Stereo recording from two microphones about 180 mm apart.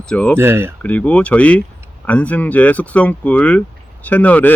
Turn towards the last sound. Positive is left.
turn(degrees=10)  # may be behind; listen again after turning